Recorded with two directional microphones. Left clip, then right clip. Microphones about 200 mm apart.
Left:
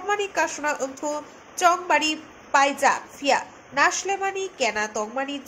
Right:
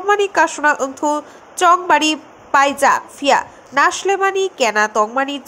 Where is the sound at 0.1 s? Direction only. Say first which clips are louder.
Right 10 dB; 25° right (ahead or behind).